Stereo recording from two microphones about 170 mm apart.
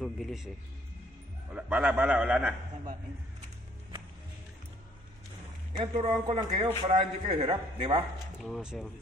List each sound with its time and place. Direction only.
0.0 s speech: centre (ahead or behind)
1.5 s a man's voice: 5° right (ahead or behind)
5.8 s a man's voice: 30° right (ahead or behind)
8.4 s speech: centre (ahead or behind)